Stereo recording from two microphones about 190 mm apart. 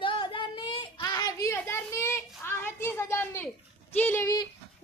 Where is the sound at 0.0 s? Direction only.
25° left (ahead or behind).